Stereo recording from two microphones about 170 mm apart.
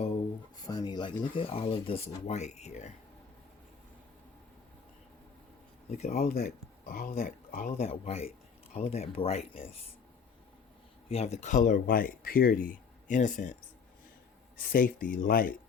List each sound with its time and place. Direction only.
0.5 s speech: 25° left (ahead or behind); by 2.9 s 40° left (ahead or behind)
5.9 s speech: 40° left (ahead or behind)
6.1 s speech: 65° left (ahead or behind)
7.9 s speech: 35° left (ahead or behind)
11.1 s speech: 40° left (ahead or behind); by 15.5 s 55° left (ahead or behind)